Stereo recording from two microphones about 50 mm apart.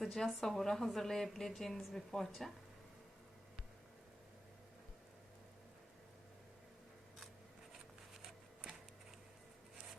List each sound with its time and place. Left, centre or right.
0.0 s a woman's voice: centre